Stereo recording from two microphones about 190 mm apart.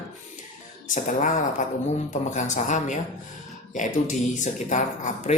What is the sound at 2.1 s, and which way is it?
Speech, 40° left (ahead or behind).